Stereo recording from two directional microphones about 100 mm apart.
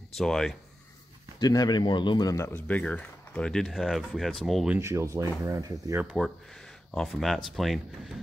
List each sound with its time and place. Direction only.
0.1 s speech: 5° left (ahead or behind)
1.4 s a man's voice: 40° left (ahead or behind)
2.3 s speech: 25° left (ahead or behind)
2.7 s speech: 15° left (ahead or behind)
4.6 s speech: 25° right (ahead or behind)
6.1 s speech: centre (ahead or behind)